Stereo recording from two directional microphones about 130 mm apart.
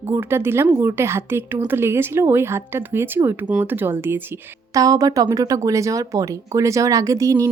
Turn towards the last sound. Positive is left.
turn(degrees=-25)  # may be behind; listen again after turning